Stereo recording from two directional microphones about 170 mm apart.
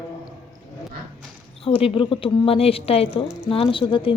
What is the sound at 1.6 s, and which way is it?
A woman's voice, 30° left (ahead or behind).